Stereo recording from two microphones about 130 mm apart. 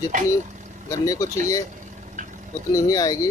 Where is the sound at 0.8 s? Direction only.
25° left (ahead or behind).